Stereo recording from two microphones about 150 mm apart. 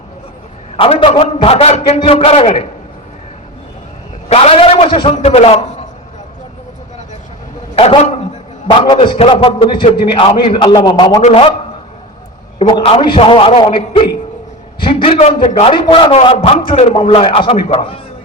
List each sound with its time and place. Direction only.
0.8 s a man's voice: 40° left (ahead or behind)
4.3 s a man's voice: 45° left (ahead or behind)
7.8 s a man's voice: 40° left (ahead or behind)
11.2 s a man's voice: 50° left (ahead or behind)
12.5 s a man's voice: 35° left (ahead or behind)